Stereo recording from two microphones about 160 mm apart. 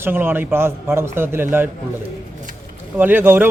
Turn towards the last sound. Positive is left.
turn(degrees=-15)  # may be behind; listen again after turning